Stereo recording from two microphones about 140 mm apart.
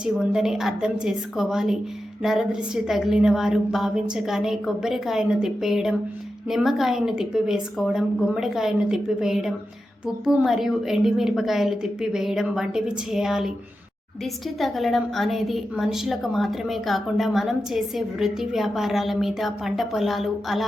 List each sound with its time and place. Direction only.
0.0 s a woman's voice: 5° right (ahead or behind)
14.6 s a woman's voice: centre (ahead or behind)